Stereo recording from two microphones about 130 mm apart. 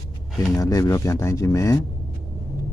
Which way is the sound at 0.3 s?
25° left (ahead or behind).